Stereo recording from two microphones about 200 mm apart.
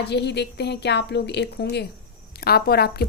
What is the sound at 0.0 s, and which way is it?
A woman's voice, 55° left (ahead or behind).